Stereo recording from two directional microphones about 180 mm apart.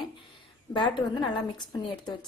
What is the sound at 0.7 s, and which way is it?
A woman's voice, 25° left (ahead or behind).